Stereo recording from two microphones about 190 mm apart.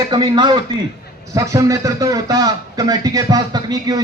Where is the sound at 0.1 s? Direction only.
20° right (ahead or behind).